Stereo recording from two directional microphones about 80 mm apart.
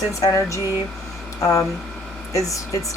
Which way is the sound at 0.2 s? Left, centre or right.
Left.